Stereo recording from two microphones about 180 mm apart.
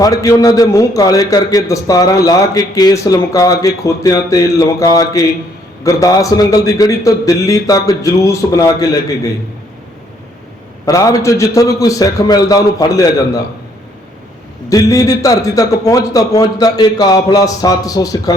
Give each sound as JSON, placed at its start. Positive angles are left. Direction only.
{"t": 0.0, "sound": "a man's voice", "side_deg": 20}
{"t": 10.8, "sound": "a man's voice", "side_deg": 20}
{"t": 14.7, "sound": "a man's voice", "side_deg": 20}